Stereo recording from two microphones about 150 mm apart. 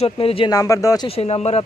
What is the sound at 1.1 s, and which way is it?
Speech, 40° left (ahead or behind).